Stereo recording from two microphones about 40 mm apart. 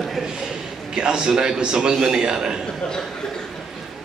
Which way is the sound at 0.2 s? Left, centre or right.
Centre.